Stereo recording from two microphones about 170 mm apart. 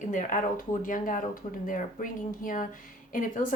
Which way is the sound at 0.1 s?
50° left (ahead or behind).